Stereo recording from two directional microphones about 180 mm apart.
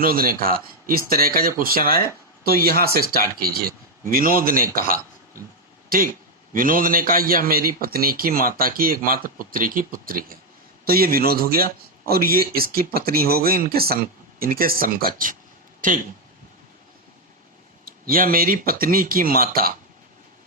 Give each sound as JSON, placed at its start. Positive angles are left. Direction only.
{"t": 0.0, "sound": "a man's voice", "side_deg": -55}
{"t": 17.8, "sound": "a man's voice", "side_deg": -55}